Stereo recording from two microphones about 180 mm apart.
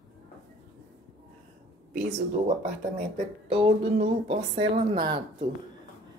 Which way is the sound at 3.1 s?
30° right (ahead or behind).